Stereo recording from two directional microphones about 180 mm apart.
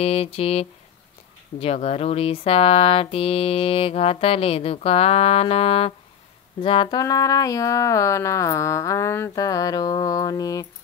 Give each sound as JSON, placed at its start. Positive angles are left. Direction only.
{"t": 0.0, "sound": "speech", "side_deg": 35}